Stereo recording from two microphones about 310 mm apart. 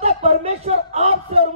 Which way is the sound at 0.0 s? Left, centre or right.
Centre.